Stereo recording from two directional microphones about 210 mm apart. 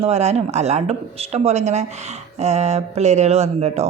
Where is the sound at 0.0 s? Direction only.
30° right (ahead or behind).